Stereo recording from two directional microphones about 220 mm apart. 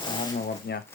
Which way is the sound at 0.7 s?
50° left (ahead or behind).